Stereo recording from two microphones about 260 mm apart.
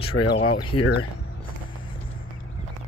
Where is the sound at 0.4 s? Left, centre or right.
Centre.